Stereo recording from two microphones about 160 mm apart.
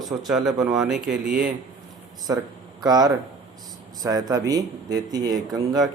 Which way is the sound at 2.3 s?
15° right (ahead or behind).